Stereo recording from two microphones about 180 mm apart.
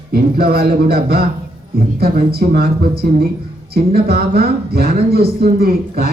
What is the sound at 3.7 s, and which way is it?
A man's voice, 60° right (ahead or behind).